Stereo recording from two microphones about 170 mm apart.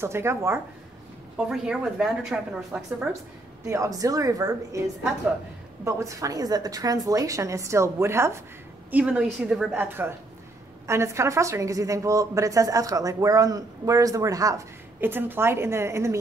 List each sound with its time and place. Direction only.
0.0 s a woman's voice: 15° right (ahead or behind)
1.3 s a woman's voice: 5° right (ahead or behind)
3.6 s a woman's voice: 15° right (ahead or behind)
5.9 s a woman's voice: 20° right (ahead or behind)